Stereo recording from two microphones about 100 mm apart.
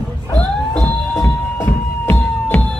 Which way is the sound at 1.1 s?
20° left (ahead or behind).